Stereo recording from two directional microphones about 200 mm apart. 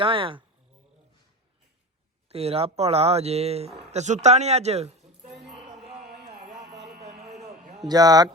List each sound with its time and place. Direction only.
0.0 s a man's voice: 25° right (ahead or behind)
2.3 s speech: 30° right (ahead or behind)
6.3 s music: 35° right (ahead or behind)
7.0 s a sound: 35° right (ahead or behind)
7.9 s a man's voice: 20° right (ahead or behind)